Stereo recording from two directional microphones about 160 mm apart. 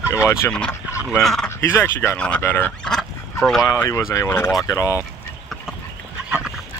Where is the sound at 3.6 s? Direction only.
15° left (ahead or behind).